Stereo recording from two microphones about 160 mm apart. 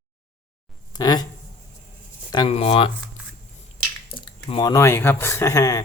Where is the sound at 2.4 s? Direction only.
40° left (ahead or behind).